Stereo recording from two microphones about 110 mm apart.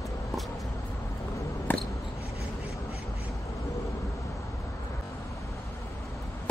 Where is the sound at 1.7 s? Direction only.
15° left (ahead or behind).